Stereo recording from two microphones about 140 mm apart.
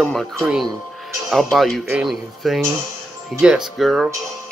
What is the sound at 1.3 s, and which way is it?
Speech, centre (ahead or behind).